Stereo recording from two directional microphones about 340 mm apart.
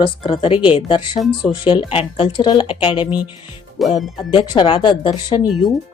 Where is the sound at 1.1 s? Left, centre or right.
Centre.